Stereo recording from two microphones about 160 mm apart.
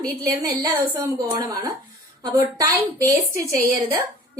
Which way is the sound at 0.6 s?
25° right (ahead or behind).